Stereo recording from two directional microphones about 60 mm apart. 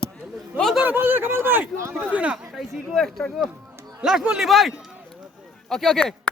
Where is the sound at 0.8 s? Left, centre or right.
Right.